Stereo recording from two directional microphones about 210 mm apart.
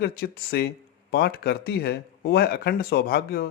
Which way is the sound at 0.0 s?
50° left (ahead or behind).